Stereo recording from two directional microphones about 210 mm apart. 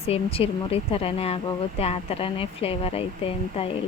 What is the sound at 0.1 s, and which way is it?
A woman's voice, 30° left (ahead or behind).